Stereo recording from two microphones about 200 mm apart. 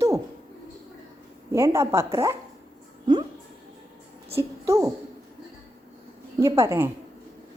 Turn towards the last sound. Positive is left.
turn(degrees=-15)  # may be behind; listen again after turning